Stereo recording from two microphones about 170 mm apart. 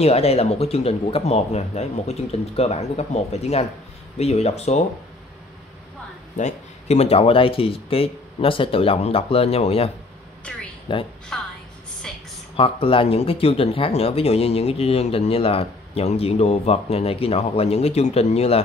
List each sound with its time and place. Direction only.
0.0 s speech: 35° left (ahead or behind)
6.3 s speech: 40° left (ahead or behind)
10.9 s a woman's voice: 30° left (ahead or behind)
11.3 s a woman's voice: 5° left (ahead or behind)
12.5 s speech: 35° left (ahead or behind)